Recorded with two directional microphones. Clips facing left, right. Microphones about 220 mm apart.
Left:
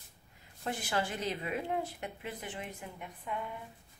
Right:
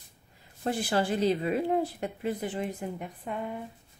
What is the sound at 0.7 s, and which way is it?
Speech, 35° right (ahead or behind).